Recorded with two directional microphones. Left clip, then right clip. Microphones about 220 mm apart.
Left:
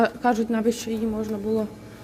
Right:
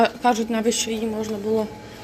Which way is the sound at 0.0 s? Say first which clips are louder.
Right 3 dB; 15° left (ahead or behind).